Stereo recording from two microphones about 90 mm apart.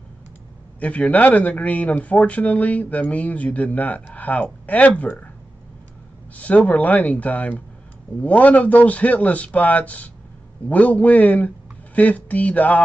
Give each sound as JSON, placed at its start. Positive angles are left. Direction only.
{"t": 0.7, "sound": "speech", "side_deg": 15}
{"t": 6.3, "sound": "speech", "side_deg": 15}